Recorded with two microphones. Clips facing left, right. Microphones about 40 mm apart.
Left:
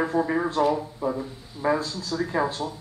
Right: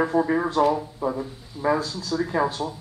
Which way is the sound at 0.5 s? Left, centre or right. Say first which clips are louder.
Right 2 dB; centre.